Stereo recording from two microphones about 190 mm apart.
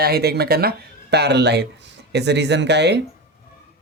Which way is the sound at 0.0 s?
55° right (ahead or behind).